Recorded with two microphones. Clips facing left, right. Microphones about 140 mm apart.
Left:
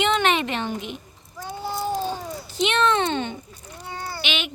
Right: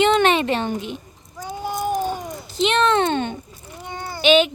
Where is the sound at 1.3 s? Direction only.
15° right (ahead or behind).